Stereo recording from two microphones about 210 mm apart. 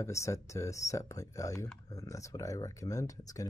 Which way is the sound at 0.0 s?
15° left (ahead or behind).